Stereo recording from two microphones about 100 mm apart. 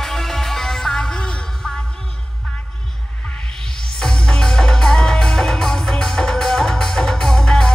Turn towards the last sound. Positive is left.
turn(degrees=5)  # may be behind; listen again after turning